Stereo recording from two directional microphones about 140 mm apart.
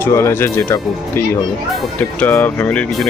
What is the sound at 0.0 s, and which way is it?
Speech, 20° left (ahead or behind).